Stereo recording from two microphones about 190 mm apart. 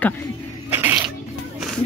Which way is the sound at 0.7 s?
10° right (ahead or behind).